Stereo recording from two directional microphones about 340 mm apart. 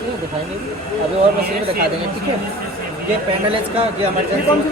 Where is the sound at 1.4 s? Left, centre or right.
Right.